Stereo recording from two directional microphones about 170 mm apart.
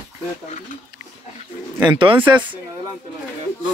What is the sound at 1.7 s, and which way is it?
Speech, 25° right (ahead or behind).